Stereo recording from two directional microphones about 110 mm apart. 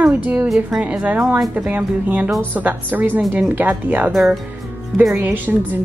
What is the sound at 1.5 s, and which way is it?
Speech, 15° right (ahead or behind).